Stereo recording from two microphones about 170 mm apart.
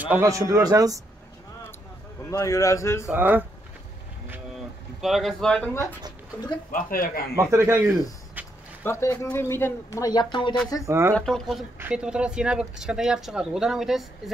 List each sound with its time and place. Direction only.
0.0 s a man's voice: 15° right (ahead or behind)
2.3 s a man's voice: 20° left (ahead or behind)
3.1 s speech: 10° right (ahead or behind)
5.0 s speech: centre (ahead or behind)
6.7 s speech: 60° left (ahead or behind)
7.5 s speech: 15° right (ahead or behind)
8.4 s a sound: 10° right (ahead or behind)
8.8 s speech: 15° left (ahead or behind)
10.9 s speech: 15° right (ahead or behind)
11.1 s speech: 5° left (ahead or behind)